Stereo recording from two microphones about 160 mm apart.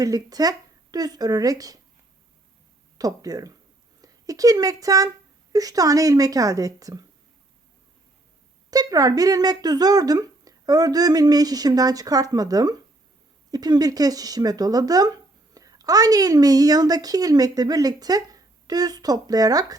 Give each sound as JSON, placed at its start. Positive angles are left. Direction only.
{"t": 0.0, "sound": "speech", "side_deg": -25}
{"t": 3.0, "sound": "speech", "side_deg": -25}
{"t": 8.7, "sound": "speech", "side_deg": -25}